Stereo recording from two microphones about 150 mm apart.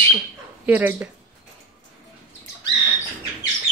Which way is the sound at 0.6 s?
10° right (ahead or behind).